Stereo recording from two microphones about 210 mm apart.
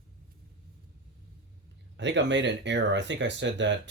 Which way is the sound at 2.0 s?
60° right (ahead or behind).